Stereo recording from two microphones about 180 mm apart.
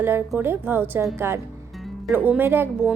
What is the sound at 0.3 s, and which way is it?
Speech, 10° right (ahead or behind).